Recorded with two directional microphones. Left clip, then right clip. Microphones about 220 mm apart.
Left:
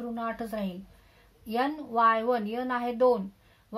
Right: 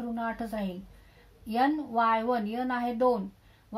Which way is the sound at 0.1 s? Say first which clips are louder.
Even; 40° left (ahead or behind).